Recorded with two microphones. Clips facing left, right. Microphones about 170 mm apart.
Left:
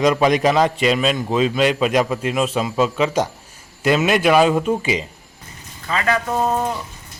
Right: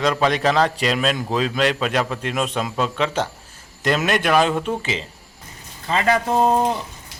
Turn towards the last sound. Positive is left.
turn(degrees=-30)  # may be behind; listen again after turning